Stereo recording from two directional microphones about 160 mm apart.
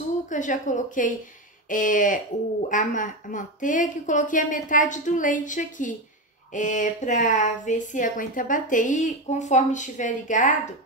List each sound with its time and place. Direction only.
0.3 s speech: 50° left (ahead or behind)